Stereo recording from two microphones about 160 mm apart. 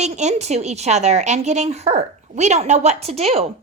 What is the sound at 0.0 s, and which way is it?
A woman's voice, 45° right (ahead or behind).